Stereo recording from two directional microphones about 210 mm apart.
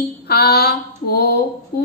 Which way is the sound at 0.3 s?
50° left (ahead or behind).